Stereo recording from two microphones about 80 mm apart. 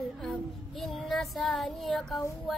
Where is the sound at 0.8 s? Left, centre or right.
Centre.